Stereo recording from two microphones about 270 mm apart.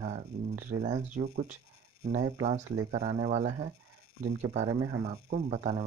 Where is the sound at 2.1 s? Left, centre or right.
Right.